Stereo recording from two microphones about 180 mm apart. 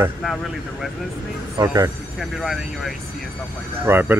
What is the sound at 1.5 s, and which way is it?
Speech, 20° right (ahead or behind).